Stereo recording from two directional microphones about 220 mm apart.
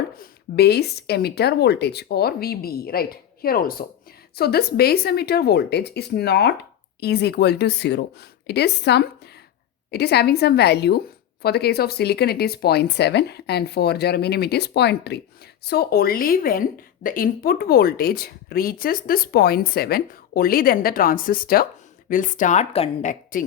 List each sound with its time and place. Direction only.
0.2 s a woman's voice: 45° left (ahead or behind); by 23.1 s 30° left (ahead or behind)